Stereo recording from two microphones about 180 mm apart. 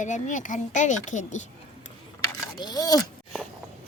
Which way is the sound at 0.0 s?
45° left (ahead or behind).